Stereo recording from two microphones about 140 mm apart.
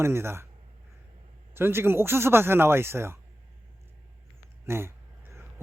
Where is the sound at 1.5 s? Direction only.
15° right (ahead or behind).